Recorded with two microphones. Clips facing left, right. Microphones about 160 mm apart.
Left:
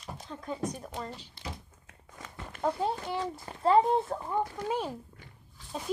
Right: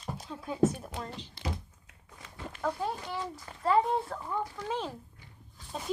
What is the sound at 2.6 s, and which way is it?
Speech, 25° left (ahead or behind).